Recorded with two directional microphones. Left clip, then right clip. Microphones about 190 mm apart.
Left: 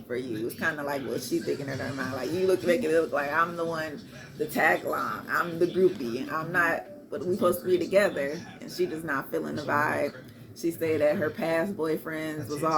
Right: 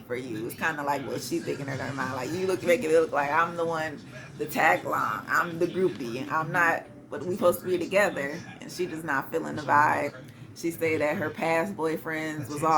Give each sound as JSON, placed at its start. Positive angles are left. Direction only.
{"t": 0.1, "sound": "speech", "side_deg": -15}